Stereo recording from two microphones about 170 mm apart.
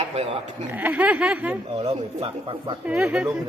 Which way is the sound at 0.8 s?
10° right (ahead or behind).